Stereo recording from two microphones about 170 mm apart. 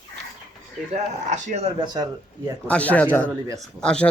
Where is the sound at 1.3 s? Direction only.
40° right (ahead or behind).